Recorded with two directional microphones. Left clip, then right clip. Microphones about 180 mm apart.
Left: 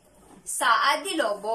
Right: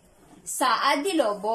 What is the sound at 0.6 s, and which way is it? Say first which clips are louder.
Speech: left 1 dB; 20° right (ahead or behind).